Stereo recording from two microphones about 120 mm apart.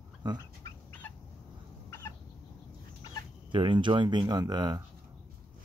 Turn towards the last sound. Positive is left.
turn(degrees=-35)  # may be behind; listen again after turning